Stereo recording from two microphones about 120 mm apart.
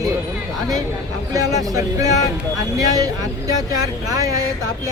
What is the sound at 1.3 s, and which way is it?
Speech, 30° right (ahead or behind).